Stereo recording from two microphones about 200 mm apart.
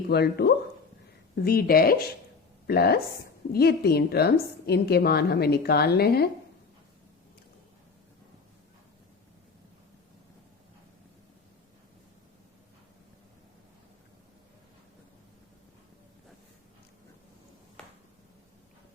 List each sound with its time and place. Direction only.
0.1 s a woman's voice: 55° left (ahead or behind)